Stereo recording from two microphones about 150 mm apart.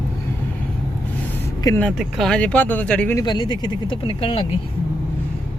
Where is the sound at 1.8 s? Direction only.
Centre (ahead or behind).